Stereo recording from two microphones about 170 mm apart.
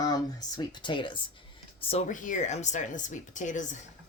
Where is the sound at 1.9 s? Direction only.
45° left (ahead or behind).